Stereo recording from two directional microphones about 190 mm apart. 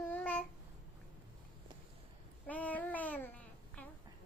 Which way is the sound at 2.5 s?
10° left (ahead or behind).